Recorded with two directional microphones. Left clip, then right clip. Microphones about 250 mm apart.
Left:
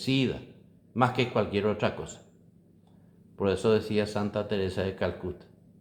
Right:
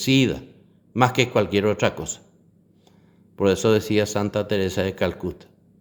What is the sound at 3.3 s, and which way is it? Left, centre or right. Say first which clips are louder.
A man's voice: right 6 dB; right.